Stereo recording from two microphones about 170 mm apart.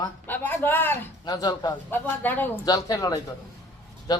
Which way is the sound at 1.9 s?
10° left (ahead or behind).